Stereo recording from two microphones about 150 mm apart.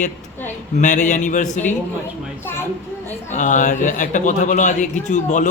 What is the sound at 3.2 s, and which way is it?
Speech, 55° left (ahead or behind).